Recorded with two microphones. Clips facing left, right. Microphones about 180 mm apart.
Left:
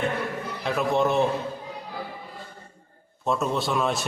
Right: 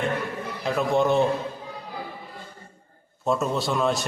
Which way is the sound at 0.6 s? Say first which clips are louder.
Right 1 dB; centre (ahead or behind).